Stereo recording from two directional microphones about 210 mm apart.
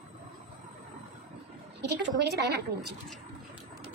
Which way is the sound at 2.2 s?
50° right (ahead or behind).